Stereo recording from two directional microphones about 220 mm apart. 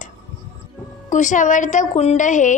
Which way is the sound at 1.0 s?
35° left (ahead or behind).